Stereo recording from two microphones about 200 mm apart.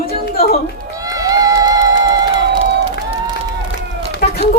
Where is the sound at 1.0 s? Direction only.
15° right (ahead or behind).